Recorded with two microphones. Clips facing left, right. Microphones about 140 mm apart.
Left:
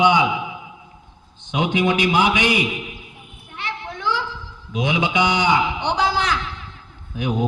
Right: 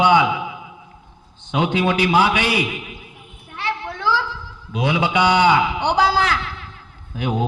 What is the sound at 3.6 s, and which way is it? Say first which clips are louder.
Children playing: right 4 dB; 20° left (ahead or behind).